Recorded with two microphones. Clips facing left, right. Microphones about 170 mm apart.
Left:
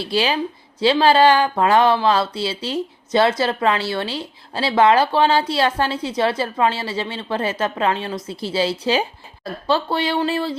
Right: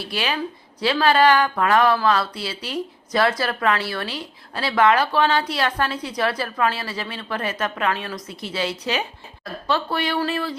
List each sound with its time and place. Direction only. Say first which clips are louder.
0.0 s speech: left 5 dB; 30° left (ahead or behind)